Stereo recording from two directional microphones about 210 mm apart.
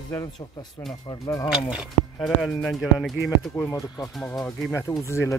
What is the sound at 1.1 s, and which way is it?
Speech, 20° left (ahead or behind).